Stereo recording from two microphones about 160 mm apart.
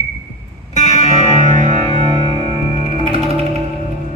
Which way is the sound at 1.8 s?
35° right (ahead or behind).